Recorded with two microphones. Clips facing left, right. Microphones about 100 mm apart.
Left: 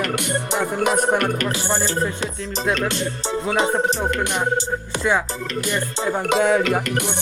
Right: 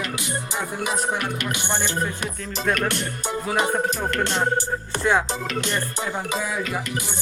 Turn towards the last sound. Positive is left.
turn(degrees=60)  # may be behind; listen again after turning